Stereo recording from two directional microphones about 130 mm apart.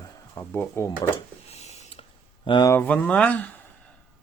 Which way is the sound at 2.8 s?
15° left (ahead or behind).